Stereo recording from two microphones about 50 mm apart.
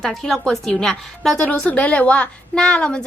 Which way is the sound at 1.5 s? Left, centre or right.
Left.